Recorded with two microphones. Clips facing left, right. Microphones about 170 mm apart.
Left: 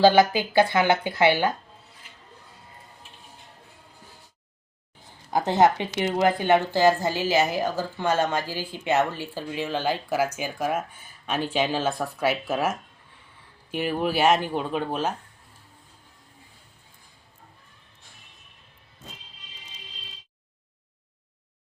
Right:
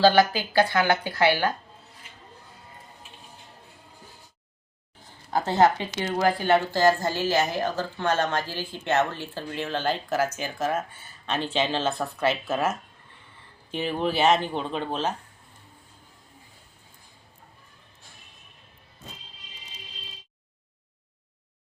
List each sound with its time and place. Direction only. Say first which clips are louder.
0.0 s speech: left 2 dB; 20° left (ahead or behind)
5.3 s speech: left 1 dB; 20° left (ahead or behind)